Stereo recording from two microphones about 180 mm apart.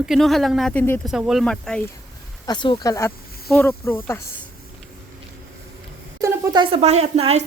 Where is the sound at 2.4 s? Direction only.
25° left (ahead or behind).